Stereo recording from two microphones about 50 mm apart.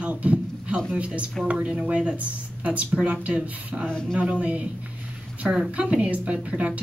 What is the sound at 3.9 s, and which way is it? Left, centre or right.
Speech, centre.